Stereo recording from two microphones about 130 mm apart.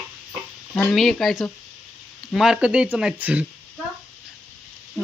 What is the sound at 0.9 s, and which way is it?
Speech, centre (ahead or behind).